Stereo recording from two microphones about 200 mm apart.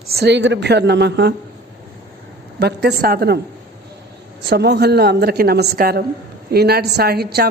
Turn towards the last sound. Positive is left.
turn(degrees=-50)  # may be behind; listen again after turning